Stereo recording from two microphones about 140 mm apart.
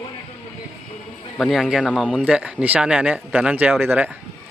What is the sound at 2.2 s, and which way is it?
Speech, 10° right (ahead or behind).